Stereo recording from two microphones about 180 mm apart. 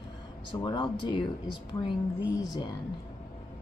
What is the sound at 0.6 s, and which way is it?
Speech, 25° left (ahead or behind).